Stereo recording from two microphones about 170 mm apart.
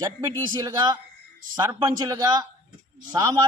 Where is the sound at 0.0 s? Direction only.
25° right (ahead or behind).